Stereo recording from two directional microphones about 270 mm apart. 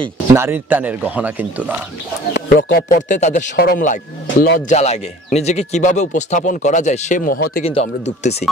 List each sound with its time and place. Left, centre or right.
0.3 s speech: centre
2.3 s speech: left